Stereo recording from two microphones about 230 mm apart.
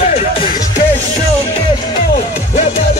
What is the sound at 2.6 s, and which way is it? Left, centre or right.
Music, left.